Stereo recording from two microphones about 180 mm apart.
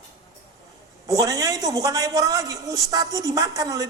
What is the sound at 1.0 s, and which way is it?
A man's voice, 20° right (ahead or behind).